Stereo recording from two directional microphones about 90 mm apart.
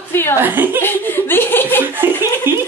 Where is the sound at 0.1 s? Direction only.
25° left (ahead or behind).